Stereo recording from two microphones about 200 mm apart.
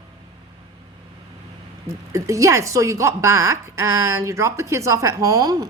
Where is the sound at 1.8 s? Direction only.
15° right (ahead or behind).